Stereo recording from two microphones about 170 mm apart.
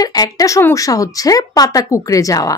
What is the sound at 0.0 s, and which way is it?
Speech, 20° left (ahead or behind).